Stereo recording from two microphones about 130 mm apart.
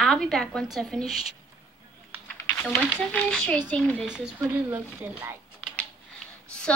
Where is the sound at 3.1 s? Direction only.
10° left (ahead or behind).